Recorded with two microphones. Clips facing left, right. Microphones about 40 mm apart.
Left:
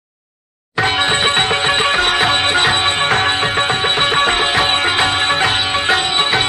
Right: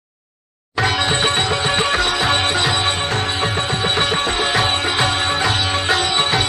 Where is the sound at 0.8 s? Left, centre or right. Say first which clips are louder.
Left 3 dB; left.